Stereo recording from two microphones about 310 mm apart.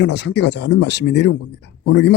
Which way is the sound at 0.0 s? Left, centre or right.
Left.